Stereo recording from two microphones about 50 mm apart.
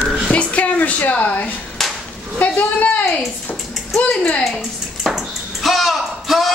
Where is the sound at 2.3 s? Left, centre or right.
Left.